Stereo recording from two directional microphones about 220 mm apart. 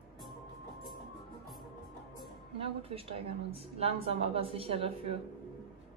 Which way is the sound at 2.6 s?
25° right (ahead or behind).